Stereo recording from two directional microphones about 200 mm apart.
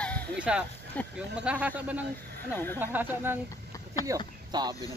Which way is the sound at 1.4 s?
5° right (ahead or behind).